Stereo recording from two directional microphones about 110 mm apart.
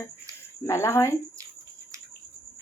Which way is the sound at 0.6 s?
25° left (ahead or behind).